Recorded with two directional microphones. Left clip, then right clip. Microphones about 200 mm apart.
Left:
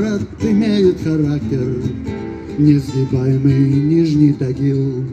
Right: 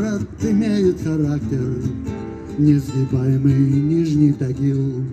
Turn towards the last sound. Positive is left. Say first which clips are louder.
# left 4 dB
turn(degrees=-15)  # may be behind; listen again after turning